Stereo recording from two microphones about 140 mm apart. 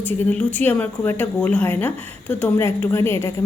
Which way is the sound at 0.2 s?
10° left (ahead or behind).